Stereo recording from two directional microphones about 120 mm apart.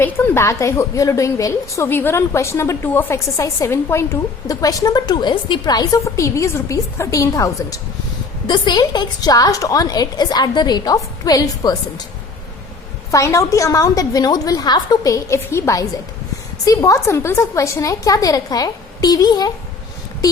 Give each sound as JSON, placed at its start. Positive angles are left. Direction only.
{"t": 0.0, "sound": "a woman's voice", "side_deg": 20}
{"t": 13.1, "sound": "a woman's voice", "side_deg": 25}